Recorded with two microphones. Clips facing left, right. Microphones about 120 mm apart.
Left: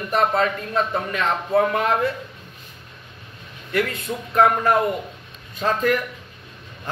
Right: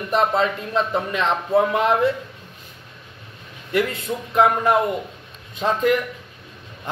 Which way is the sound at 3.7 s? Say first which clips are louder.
Right 2 dB; 15° right (ahead or behind).